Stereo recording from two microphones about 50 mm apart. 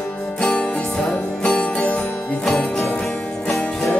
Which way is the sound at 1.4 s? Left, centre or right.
Centre.